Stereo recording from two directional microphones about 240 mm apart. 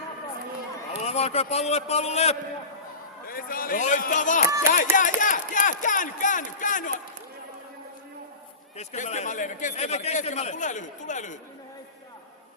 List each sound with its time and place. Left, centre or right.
1.0 s a man's voice: left
3.2 s a man's voice: left
8.8 s a man's voice: left